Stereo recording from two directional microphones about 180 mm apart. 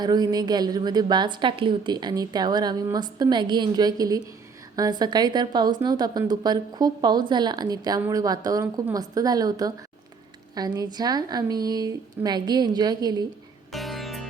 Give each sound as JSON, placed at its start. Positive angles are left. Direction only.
{"t": 0.0, "sound": "a woman's voice", "side_deg": -20}
{"t": 13.7, "sound": "music", "side_deg": 0}